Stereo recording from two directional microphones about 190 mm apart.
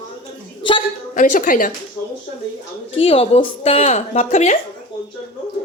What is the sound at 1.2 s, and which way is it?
Speech, 45° left (ahead or behind).